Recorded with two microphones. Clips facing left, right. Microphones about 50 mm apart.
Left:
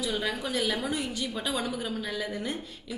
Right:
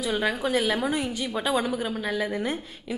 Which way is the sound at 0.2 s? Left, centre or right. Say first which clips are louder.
Right 5 dB; right.